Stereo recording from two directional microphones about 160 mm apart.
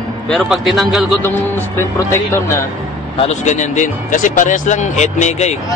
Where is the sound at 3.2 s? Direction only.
45° left (ahead or behind).